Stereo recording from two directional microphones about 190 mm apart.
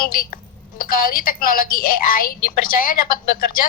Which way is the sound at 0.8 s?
50° left (ahead or behind).